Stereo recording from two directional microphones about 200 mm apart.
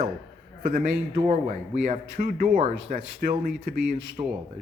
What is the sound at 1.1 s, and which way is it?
Speech, 30° right (ahead or behind).